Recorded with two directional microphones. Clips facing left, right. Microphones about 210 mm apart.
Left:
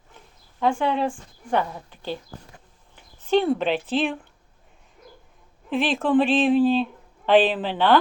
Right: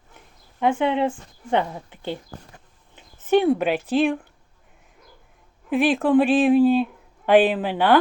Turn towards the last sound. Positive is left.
turn(degrees=-10)  # may be behind; listen again after turning